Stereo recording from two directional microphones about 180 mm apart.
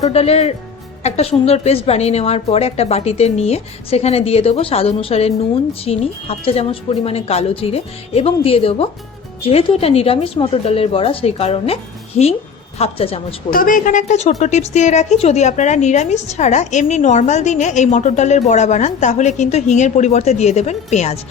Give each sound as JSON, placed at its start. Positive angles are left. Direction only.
{"t": 0.0, "sound": "a woman's voice", "side_deg": 35}
{"t": 13.5, "sound": "a woman's voice", "side_deg": 50}